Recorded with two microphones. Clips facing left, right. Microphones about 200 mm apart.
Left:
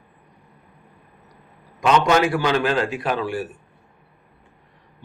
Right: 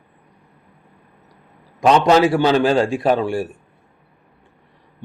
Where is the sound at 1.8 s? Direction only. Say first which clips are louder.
Right 4 dB; 35° right (ahead or behind).